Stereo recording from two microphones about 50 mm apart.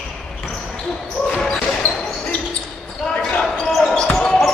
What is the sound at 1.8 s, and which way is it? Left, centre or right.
Basketball bounce, left.